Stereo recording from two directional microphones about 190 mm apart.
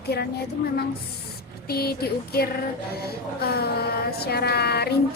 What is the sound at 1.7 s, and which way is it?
Speech, 55° left (ahead or behind).